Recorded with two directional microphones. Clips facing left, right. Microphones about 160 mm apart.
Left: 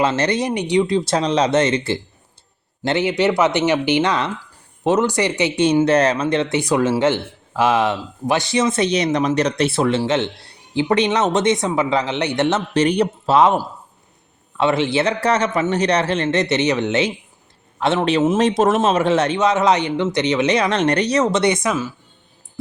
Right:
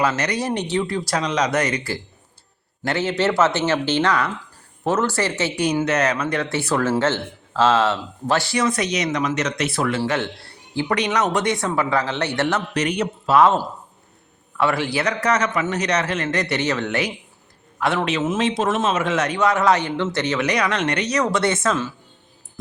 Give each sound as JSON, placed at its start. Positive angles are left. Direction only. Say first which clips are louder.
{"t": 0.0, "sound": "speech", "louder": "left 3 dB", "side_deg": 25}
{"t": 0.5, "sound": "speech", "louder": "left 5 dB", "side_deg": 15}